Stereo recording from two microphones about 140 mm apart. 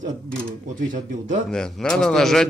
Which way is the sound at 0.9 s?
65° right (ahead or behind).